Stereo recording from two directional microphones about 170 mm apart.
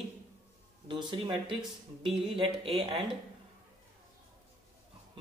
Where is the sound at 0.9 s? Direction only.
30° right (ahead or behind).